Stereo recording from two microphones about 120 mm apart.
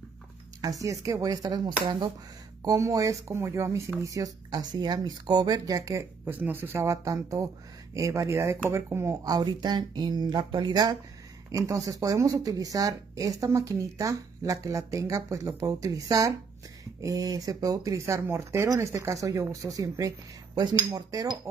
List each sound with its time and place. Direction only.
0.6 s speech: 30° right (ahead or behind)
2.6 s speech: 30° right (ahead or behind)